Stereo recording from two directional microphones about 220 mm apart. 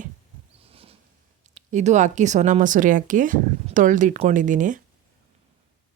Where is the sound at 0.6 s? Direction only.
25° right (ahead or behind).